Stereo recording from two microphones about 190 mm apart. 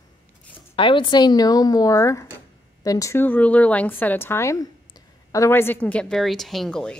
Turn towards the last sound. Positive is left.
turn(degrees=5)  # may be behind; listen again after turning